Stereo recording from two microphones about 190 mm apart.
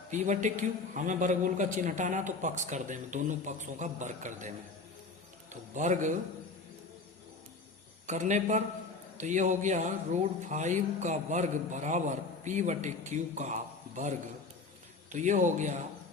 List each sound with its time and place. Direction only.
0.1 s speech: 40° right (ahead or behind)
5.7 s speech: 40° right (ahead or behind)
8.0 s speech: 40° right (ahead or behind)
15.1 s speech: 40° right (ahead or behind)